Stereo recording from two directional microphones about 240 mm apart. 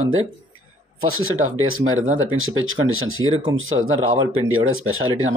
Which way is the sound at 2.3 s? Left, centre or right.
Right.